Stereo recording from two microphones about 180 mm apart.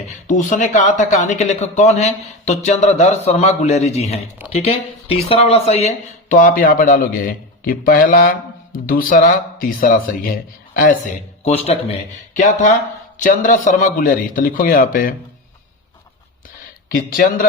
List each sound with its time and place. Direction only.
0.3 s speech: 45° left (ahead or behind)
11.5 s speech: 35° left (ahead or behind); by 15.1 s 50° left (ahead or behind)
17.2 s speech: 50° left (ahead or behind)